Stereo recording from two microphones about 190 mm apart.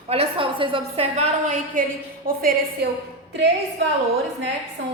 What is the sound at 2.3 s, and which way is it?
Speech, 50° right (ahead or behind).